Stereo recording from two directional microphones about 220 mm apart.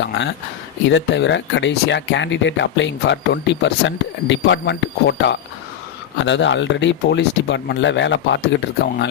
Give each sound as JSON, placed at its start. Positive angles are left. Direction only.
{"t": 0.0, "sound": "speech", "side_deg": 55}